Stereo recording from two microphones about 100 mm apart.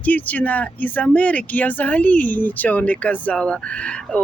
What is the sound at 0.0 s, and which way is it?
Speech, 15° left (ahead or behind).